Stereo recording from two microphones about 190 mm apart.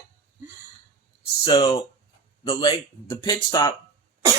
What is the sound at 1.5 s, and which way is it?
Speech, 25° left (ahead or behind).